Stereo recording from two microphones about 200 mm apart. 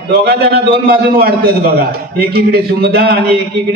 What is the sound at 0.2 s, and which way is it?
A man's voice, 50° right (ahead or behind).